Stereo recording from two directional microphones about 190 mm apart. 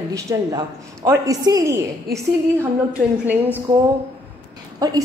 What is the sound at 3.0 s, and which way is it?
Speech, 10° right (ahead or behind).